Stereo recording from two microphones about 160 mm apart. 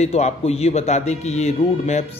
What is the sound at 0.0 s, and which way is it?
A man's voice, 40° left (ahead or behind).